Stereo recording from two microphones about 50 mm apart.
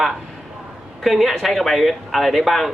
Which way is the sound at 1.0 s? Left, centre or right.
Centre.